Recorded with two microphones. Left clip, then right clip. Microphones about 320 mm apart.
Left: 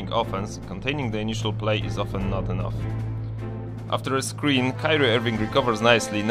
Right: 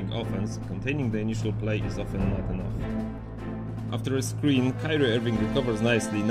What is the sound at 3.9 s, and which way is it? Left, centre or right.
Speech, centre.